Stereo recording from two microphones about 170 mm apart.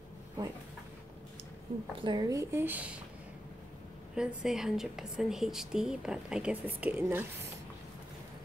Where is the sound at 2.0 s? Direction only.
20° right (ahead or behind).